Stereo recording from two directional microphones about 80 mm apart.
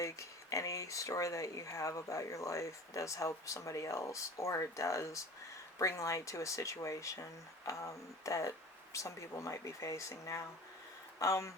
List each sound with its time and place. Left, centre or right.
0.0 s speech: left